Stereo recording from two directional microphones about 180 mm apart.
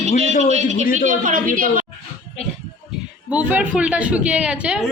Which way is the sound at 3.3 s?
10° right (ahead or behind).